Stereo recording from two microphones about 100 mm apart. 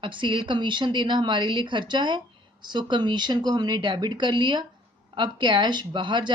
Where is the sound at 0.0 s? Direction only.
55° right (ahead or behind).